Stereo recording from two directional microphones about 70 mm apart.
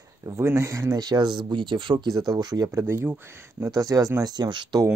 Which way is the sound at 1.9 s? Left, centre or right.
Right.